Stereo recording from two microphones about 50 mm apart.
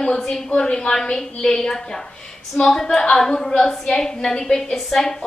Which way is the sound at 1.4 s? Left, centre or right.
Centre.